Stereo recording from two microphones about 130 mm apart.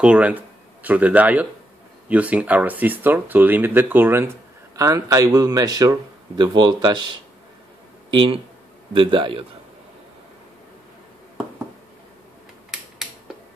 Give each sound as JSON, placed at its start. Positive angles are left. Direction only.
{"t": 0.0, "sound": "speech", "side_deg": -10}
{"t": 8.1, "sound": "a man's voice", "side_deg": -45}